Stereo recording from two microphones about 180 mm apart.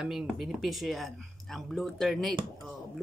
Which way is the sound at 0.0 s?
5° right (ahead or behind).